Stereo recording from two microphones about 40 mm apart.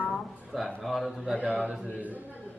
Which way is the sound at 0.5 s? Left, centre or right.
Centre.